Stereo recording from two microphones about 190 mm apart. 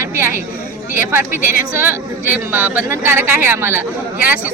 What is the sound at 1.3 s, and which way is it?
Speech, 50° left (ahead or behind).